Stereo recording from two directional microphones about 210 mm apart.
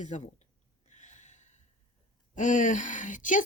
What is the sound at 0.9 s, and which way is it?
Gasp, 35° left (ahead or behind).